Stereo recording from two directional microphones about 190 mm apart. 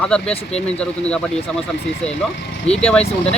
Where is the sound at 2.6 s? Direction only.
35° left (ahead or behind).